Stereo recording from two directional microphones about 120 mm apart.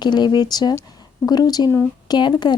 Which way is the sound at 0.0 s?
35° left (ahead or behind).